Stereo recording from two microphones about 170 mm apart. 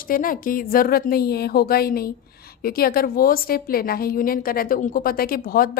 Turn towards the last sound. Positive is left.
turn(degrees=60)  # may be behind; listen again after turning